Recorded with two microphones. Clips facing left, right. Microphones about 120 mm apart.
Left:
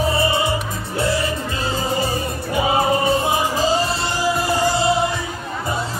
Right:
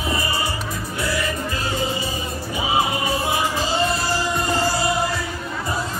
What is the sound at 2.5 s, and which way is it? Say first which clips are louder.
Music: left 5 dB; 50° left (ahead or behind).